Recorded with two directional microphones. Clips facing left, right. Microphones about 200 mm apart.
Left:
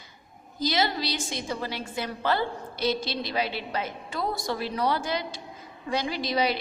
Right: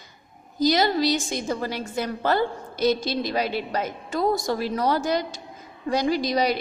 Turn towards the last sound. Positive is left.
turn(degrees=-45)  # may be behind; listen again after turning